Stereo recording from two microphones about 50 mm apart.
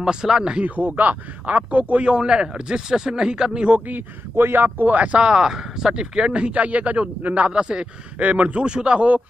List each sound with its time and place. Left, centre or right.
0.0 s speech: centre
0.7 s speech: right
3.8 s speech: right
7.5 s speech: centre